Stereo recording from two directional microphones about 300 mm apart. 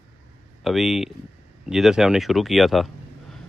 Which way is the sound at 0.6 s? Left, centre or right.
Centre.